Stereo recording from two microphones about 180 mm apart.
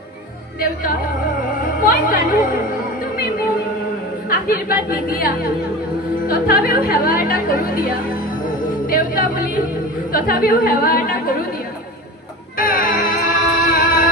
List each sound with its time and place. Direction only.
1.6 s a woman's voice: 50° left (ahead or behind)
4.3 s speech: 50° left (ahead or behind)
8.8 s music: 50° left (ahead or behind)
10.1 s speech: 50° left (ahead or behind)
12.5 s music: 50° left (ahead or behind)